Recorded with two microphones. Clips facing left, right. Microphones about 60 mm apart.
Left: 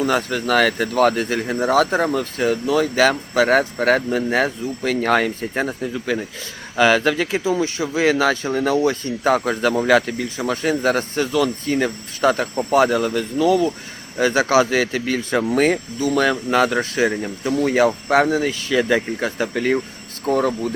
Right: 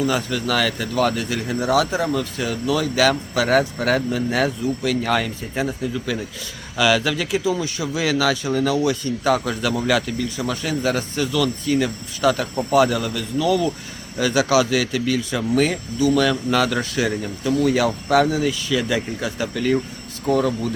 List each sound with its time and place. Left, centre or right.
0.0 s speech: left